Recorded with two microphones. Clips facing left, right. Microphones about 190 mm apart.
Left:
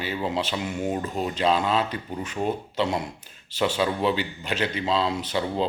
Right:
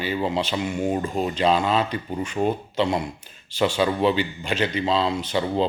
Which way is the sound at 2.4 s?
20° right (ahead or behind).